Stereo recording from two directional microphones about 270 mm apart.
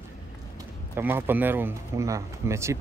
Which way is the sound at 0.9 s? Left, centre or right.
Centre.